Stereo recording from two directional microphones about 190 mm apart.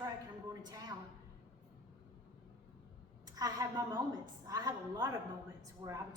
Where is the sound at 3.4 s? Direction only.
20° right (ahead or behind).